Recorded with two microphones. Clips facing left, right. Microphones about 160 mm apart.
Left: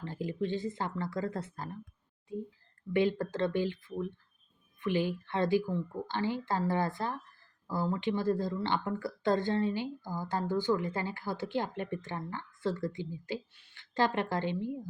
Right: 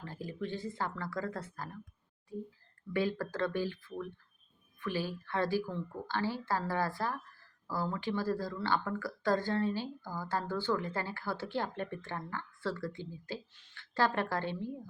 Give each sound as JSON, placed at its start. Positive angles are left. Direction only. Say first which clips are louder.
{"t": 0.0, "sound": "speech", "louder": "left 5 dB", "side_deg": 20}
{"t": 2.9, "sound": "speech", "louder": "left 4 dB", "side_deg": 20}